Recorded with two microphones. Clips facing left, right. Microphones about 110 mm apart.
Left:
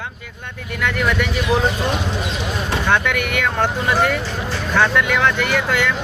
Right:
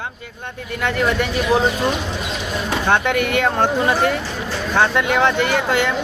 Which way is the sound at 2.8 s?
30° right (ahead or behind).